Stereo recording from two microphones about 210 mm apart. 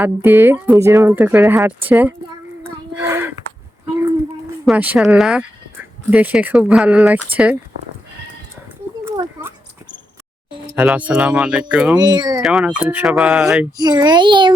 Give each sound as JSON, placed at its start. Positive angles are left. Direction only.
{"t": 0.0, "sound": "speech", "side_deg": -10}
{"t": 4.6, "sound": "speech", "side_deg": -5}
{"t": 10.8, "sound": "speech", "side_deg": -5}
{"t": 11.9, "sound": "a child's voice", "side_deg": -20}
{"t": 12.4, "sound": "speech", "side_deg": 0}
{"t": 13.7, "sound": "a child's voice", "side_deg": -20}